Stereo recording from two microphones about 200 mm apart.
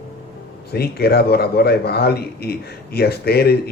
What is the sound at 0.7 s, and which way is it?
Speech, 50° left (ahead or behind).